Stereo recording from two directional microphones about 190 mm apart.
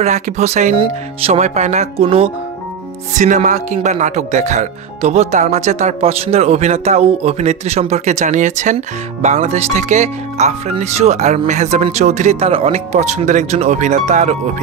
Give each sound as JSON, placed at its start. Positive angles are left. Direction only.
{"t": 0.0, "sound": "speech", "side_deg": -35}